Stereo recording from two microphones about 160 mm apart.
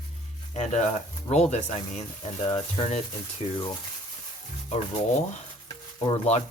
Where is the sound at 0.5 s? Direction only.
45° left (ahead or behind).